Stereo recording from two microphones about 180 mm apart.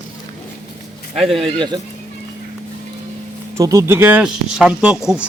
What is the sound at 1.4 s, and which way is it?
Speech, 25° right (ahead or behind).